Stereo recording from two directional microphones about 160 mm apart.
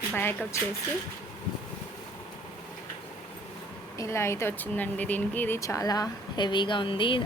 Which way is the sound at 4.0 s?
15° left (ahead or behind).